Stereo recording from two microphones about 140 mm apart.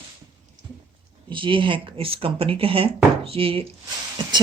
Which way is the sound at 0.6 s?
60° right (ahead or behind).